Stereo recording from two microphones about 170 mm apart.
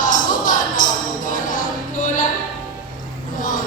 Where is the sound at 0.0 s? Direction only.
50° left (ahead or behind).